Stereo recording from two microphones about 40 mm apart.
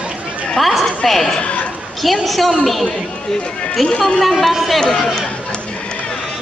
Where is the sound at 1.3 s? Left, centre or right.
Left.